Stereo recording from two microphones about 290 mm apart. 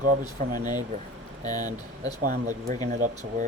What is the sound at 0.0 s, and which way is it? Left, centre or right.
Speech, right.